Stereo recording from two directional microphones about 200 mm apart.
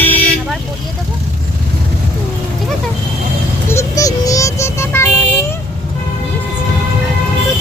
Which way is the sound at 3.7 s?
15° left (ahead or behind).